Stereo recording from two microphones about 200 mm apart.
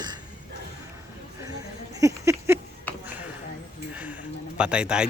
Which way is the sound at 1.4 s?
20° right (ahead or behind).